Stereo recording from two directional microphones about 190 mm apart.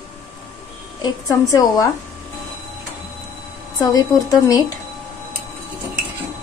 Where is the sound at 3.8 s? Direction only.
20° left (ahead or behind).